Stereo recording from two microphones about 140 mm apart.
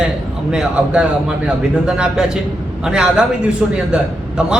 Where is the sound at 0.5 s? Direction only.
5° right (ahead or behind).